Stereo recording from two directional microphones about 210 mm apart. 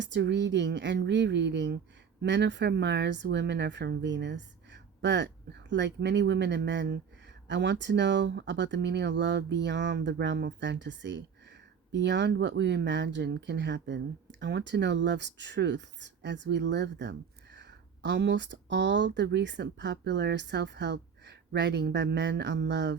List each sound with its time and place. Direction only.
0.0 s speech: 55° right (ahead or behind)